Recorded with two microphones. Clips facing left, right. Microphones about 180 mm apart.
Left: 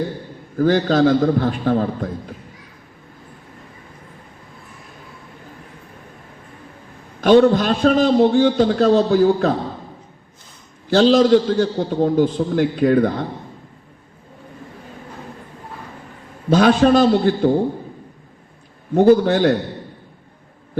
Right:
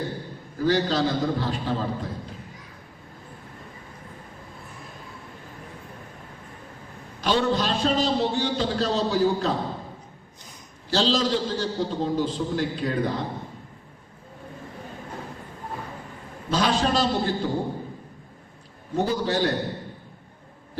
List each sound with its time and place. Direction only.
0.6 s a man's voice: 55° left (ahead or behind)
7.2 s a man's voice: 55° left (ahead or behind)
10.8 s a man's voice: 55° left (ahead or behind)
16.5 s a man's voice: 55° left (ahead or behind)
19.0 s a man's voice: 55° left (ahead or behind)